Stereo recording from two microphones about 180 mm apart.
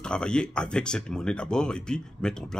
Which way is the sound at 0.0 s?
5° left (ahead or behind).